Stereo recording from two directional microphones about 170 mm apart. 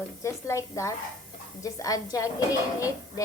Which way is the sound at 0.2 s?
15° left (ahead or behind).